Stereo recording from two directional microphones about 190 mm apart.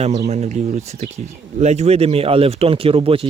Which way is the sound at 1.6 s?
35° right (ahead or behind).